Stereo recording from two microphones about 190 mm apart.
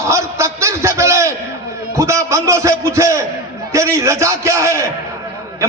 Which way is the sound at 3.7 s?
15° right (ahead or behind).